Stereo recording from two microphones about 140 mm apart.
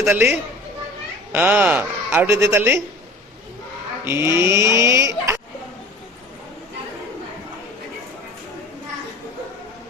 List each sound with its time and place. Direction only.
0.1 s a woman's voice: 15° right (ahead or behind)
4.0 s speech: 20° right (ahead or behind)